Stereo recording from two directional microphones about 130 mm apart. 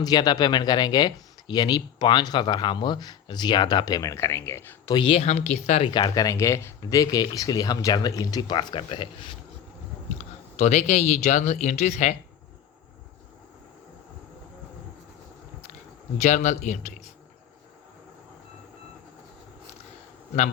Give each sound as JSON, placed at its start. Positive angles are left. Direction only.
{"t": 0.0, "sound": "speech", "side_deg": 30}
{"t": 4.9, "sound": "speech", "side_deg": 40}
{"t": 5.2, "sound": "speech", "side_deg": 60}
{"t": 5.9, "sound": "speech", "side_deg": 30}
{"t": 10.2, "sound": "speech", "side_deg": 60}
{"t": 16.1, "sound": "speech", "side_deg": 60}